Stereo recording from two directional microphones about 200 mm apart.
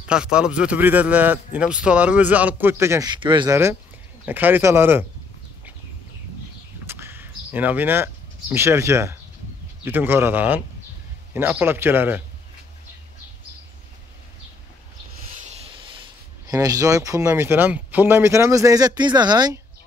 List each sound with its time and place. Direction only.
0.1 s a man's voice: 5° right (ahead or behind); by 3.5 s 25° right (ahead or behind)
4.3 s a man's voice: 10° right (ahead or behind)
6.9 s a sound: 10° right (ahead or behind)
9.8 s a man's voice: 10° right (ahead or behind)
15.4 s speech: 25° right (ahead or behind)